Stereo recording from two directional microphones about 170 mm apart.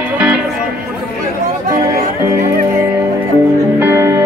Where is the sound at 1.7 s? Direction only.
60° right (ahead or behind).